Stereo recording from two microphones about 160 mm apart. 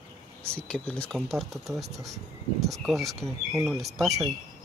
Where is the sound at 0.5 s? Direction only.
5° left (ahead or behind).